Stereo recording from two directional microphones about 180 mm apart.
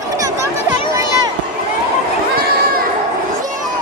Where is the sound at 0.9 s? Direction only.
20° right (ahead or behind).